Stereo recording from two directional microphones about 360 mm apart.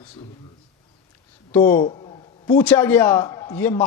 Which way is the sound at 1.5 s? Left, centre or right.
Centre.